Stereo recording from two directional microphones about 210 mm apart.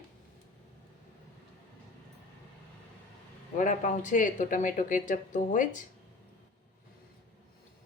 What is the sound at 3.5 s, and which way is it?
Speech, 35° left (ahead or behind).